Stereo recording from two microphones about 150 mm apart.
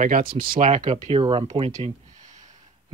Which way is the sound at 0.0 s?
70° right (ahead or behind).